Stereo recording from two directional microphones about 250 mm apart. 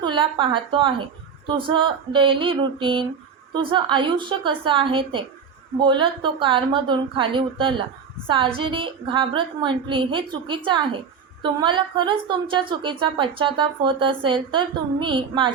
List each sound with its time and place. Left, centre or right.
0.0 s a woman's voice: centre